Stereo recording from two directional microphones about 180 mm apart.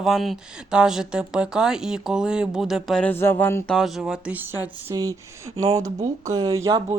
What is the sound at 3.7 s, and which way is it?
Speech, centre (ahead or behind).